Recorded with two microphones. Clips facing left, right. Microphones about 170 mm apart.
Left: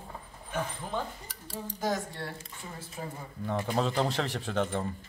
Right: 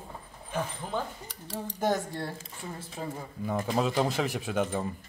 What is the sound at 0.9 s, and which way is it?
Speech, centre (ahead or behind).